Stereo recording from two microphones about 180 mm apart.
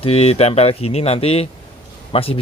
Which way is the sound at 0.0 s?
35° left (ahead or behind).